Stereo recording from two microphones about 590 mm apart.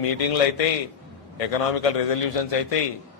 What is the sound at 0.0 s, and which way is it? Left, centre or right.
A man's voice, left.